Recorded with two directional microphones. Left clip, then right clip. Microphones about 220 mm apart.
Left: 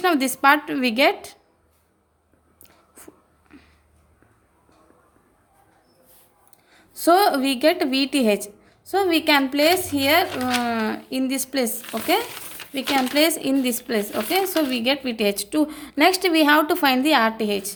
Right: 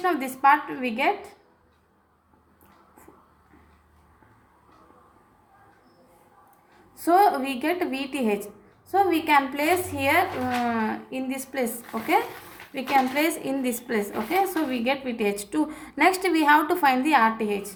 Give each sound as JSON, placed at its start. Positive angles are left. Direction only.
{"t": 0.0, "sound": "speech", "side_deg": 55}
{"t": 6.9, "sound": "a woman's voice", "side_deg": 60}